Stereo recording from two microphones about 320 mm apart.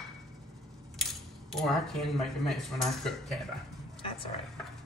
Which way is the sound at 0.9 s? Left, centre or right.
Centre.